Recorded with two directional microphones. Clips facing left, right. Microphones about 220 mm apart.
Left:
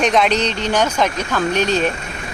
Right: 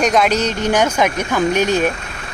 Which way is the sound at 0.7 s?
10° right (ahead or behind).